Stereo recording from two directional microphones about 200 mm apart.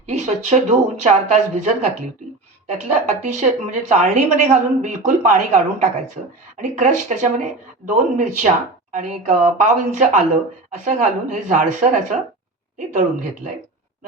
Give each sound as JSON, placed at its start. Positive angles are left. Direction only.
{"t": 0.1, "sound": "speech", "side_deg": -35}